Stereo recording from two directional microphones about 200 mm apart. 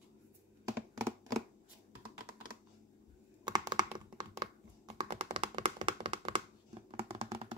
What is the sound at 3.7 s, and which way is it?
Computer keyboard, 20° right (ahead or behind).